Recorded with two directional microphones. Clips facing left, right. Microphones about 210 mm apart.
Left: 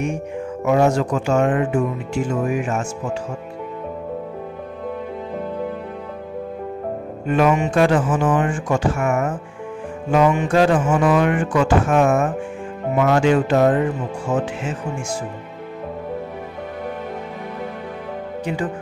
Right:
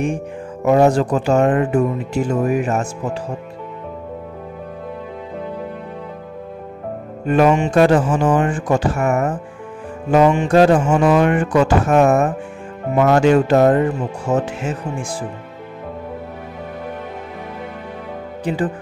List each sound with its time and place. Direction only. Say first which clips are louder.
0.7 s speech: right 4 dB; 35° right (ahead or behind)
7.2 s speech: right 3 dB; 40° right (ahead or behind)
11.0 s speech: right 2 dB; 25° right (ahead or behind)
11.2 s speech: right 3 dB; 40° right (ahead or behind)